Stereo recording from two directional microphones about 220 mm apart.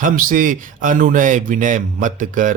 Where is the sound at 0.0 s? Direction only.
35° right (ahead or behind).